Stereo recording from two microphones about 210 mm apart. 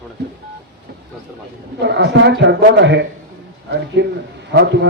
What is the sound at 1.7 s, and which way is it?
A man's voice, 55° right (ahead or behind).